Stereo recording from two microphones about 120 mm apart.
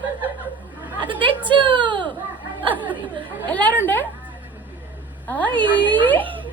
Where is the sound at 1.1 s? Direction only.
45° right (ahead or behind).